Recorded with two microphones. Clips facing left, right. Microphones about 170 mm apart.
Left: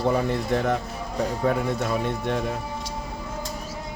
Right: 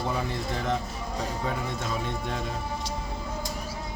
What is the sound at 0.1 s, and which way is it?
Speech, 60° left (ahead or behind).